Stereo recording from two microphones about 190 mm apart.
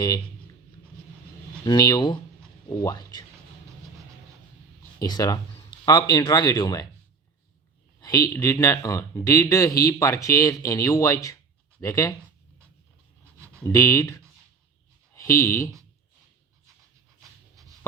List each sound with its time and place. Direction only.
1.6 s speech: 20° left (ahead or behind)
4.9 s speech: 20° left (ahead or behind)
8.0 s speech: 15° left (ahead or behind)
13.6 s speech: 15° left (ahead or behind)